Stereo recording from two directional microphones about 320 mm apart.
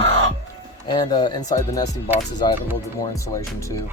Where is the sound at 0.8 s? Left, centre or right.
Centre.